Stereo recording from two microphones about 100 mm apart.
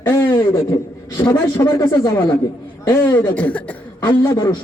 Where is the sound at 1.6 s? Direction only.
35° left (ahead or behind).